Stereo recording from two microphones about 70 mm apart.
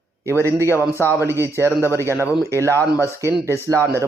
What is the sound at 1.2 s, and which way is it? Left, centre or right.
Speech, right.